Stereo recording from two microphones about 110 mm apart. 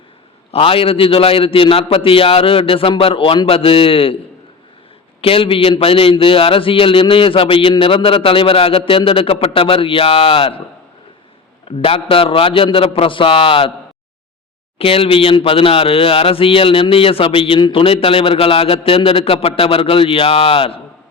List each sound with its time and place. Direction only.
0.5 s speech: 60° left (ahead or behind)
5.2 s speech: 55° left (ahead or behind)
11.8 s speech: 60° left (ahead or behind)
14.8 s speech: 60° left (ahead or behind)